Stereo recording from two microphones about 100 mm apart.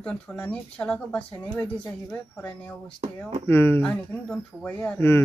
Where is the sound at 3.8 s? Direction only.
10° left (ahead or behind).